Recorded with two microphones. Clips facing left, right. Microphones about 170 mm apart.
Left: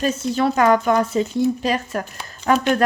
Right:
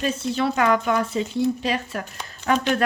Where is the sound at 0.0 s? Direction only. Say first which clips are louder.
Left 3 dB; 45° left (ahead or behind).